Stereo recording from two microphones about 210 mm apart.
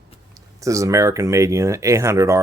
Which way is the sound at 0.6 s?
15° right (ahead or behind).